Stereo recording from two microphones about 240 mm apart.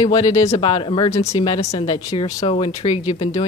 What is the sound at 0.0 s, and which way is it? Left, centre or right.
Speech, left.